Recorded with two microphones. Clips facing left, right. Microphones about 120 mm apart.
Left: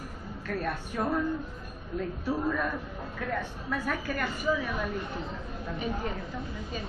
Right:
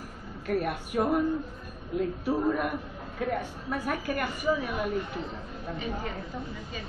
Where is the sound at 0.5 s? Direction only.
15° right (ahead or behind).